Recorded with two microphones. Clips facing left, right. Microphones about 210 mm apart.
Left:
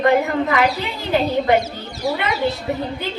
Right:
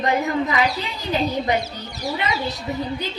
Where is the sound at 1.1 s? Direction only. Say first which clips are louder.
Left 5 dB; 60° left (ahead or behind).